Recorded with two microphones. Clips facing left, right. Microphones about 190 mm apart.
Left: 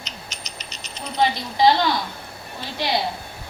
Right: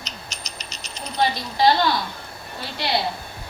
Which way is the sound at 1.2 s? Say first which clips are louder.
Left 1 dB; 20° left (ahead or behind).